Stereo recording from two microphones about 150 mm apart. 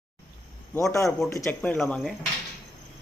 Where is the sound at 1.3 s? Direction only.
15° left (ahead or behind).